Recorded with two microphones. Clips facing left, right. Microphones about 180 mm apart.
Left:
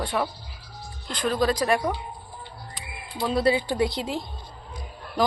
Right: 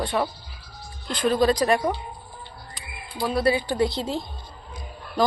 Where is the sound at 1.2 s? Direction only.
Centre (ahead or behind).